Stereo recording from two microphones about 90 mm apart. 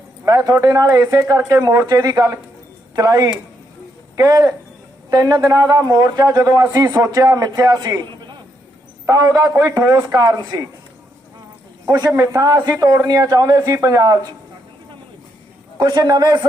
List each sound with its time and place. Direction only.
0.3 s a man's voice: 40° right (ahead or behind)
9.0 s a man's voice: 45° right (ahead or behind)
12.1 s a man's voice: 35° right (ahead or behind)
15.8 s a man's voice: 50° right (ahead or behind)